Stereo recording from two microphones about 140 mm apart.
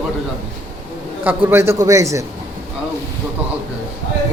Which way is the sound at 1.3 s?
15° right (ahead or behind).